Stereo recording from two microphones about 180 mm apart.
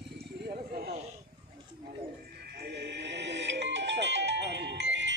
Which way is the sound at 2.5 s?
65° right (ahead or behind).